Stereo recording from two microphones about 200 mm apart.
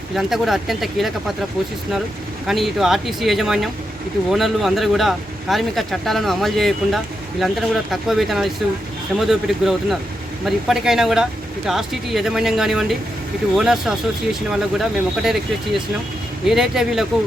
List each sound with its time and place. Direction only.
0.2 s speech: centre (ahead or behind)
2.5 s speech: centre (ahead or behind)
16.5 s speech: centre (ahead or behind)